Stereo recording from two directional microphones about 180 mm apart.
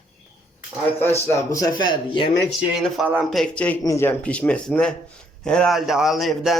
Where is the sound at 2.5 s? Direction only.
Centre (ahead or behind).